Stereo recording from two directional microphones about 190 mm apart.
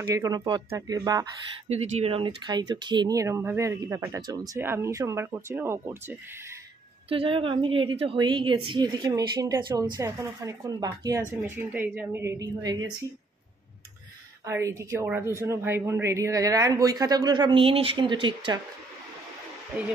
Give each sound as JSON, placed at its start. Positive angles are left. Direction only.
{"t": 0.0, "sound": "speech", "side_deg": -15}
{"t": 1.7, "sound": "speech", "side_deg": -35}
{"t": 7.1, "sound": "a woman's voice", "side_deg": -30}
{"t": 14.4, "sound": "speech", "side_deg": -15}